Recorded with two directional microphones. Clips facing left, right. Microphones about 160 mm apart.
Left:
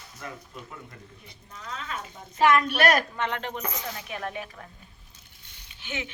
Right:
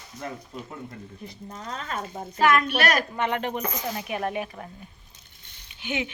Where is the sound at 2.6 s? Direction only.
50° left (ahead or behind).